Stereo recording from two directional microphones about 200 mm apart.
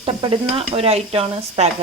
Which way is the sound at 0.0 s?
25° right (ahead or behind).